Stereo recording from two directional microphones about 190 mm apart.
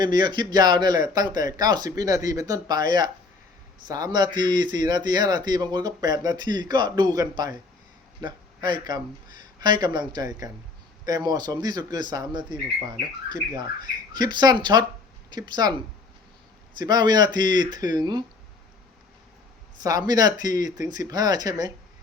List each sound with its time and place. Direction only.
0.0 s speech: 20° right (ahead or behind)
16.7 s speech: 20° right (ahead or behind)
19.8 s speech: 20° right (ahead or behind)